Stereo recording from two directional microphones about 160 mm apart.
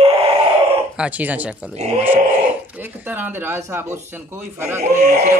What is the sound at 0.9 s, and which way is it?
Speech, 10° right (ahead or behind).